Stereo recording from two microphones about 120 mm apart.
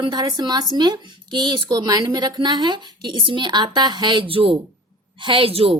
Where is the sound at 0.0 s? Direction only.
35° right (ahead or behind).